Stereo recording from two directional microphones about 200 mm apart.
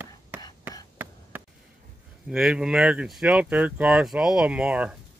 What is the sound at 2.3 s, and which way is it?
Speech, 5° right (ahead or behind).